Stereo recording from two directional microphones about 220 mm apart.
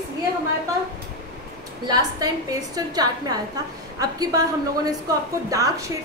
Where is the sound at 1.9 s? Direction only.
15° right (ahead or behind).